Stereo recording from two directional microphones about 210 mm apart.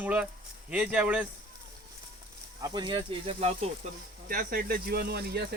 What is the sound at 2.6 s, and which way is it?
Speech, 20° right (ahead or behind).